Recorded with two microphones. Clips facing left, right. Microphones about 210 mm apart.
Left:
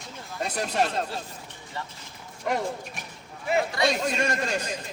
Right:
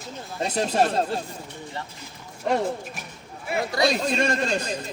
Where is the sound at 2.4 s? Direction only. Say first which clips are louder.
Right 4 dB; 30° right (ahead or behind).